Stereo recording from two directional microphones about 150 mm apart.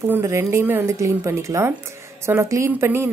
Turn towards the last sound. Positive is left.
turn(degrees=-15)  # may be behind; listen again after turning